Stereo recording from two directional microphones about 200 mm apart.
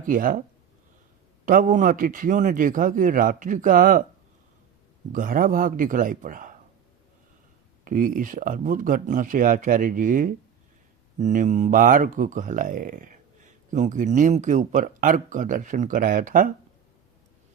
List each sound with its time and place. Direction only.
0.0 s a man's voice: 45° right (ahead or behind)
1.5 s a man's voice: 40° right (ahead or behind)
5.1 s a man's voice: 45° right (ahead or behind)
7.9 s speech: 40° right (ahead or behind)